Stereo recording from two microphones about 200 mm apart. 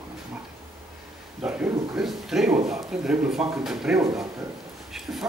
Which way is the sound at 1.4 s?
5° right (ahead or behind).